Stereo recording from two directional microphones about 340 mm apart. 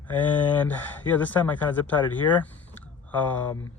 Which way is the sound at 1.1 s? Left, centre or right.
Centre.